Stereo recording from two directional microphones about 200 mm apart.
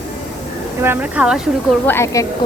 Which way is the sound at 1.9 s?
15° left (ahead or behind).